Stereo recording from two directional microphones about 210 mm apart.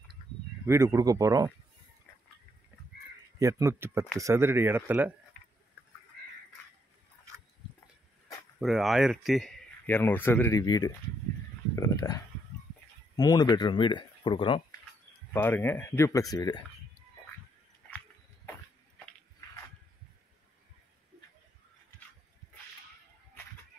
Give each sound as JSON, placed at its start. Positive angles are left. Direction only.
{"t": 0.7, "sound": "speech", "side_deg": -15}
{"t": 3.3, "sound": "speech", "side_deg": -15}
{"t": 8.5, "sound": "speech", "side_deg": 0}
{"t": 11.7, "sound": "a sound", "side_deg": 15}
{"t": 13.1, "sound": "speech", "side_deg": 20}
{"t": 15.3, "sound": "speech", "side_deg": 10}
{"t": 17.8, "sound": "horse", "side_deg": 10}